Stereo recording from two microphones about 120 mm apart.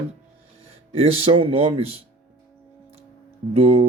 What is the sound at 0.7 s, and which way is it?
Speech, 55° right (ahead or behind).